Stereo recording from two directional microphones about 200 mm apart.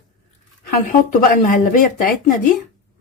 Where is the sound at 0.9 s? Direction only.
45° left (ahead or behind).